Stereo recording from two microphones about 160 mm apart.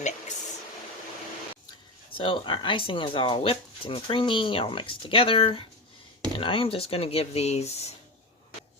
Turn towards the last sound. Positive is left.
turn(degrees=40)  # may be behind; listen again after turning